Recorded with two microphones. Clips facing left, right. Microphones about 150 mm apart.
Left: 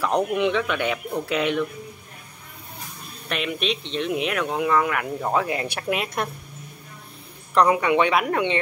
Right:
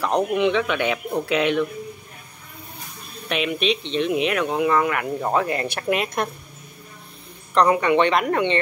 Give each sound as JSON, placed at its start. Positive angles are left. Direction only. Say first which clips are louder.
{"t": 0.0, "sound": "speech", "louder": "right 1 dB", "side_deg": -10}
{"t": 0.4, "sound": "speech", "louder": "right 2 dB", "side_deg": 0}
{"t": 3.3, "sound": "speech", "louder": "right 4 dB", "side_deg": 0}
{"t": 7.5, "sound": "speech", "louder": "right 1 dB", "side_deg": 5}